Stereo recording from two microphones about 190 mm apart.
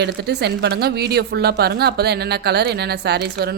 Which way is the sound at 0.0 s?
60° right (ahead or behind).